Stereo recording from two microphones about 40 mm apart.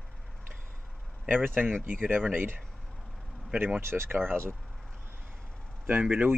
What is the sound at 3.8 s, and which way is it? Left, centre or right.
Speech, right.